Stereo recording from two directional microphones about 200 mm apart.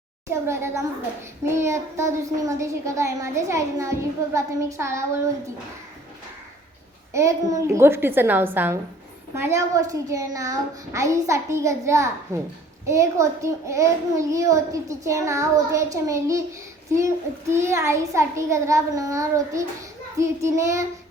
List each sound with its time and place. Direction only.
0.4 s a child's voice: 15° right (ahead or behind)
7.1 s a child's voice: 15° right (ahead or behind)
17.5 s a child's voice: 15° right (ahead or behind)